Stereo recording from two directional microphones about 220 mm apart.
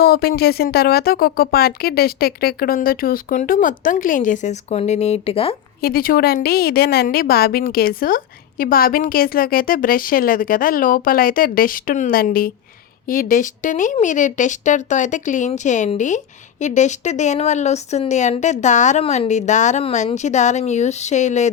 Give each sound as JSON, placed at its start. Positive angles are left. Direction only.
{"t": 0.0, "sound": "speech", "side_deg": 45}
{"t": 5.8, "sound": "speech", "side_deg": 40}